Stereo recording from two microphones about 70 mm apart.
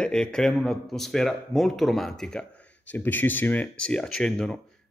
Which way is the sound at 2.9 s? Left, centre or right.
Left.